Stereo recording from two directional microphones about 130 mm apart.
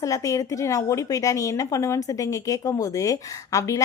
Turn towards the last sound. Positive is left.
turn(degrees=25)  # may be behind; listen again after turning